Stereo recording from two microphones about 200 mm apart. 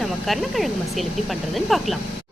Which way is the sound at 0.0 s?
Centre (ahead or behind).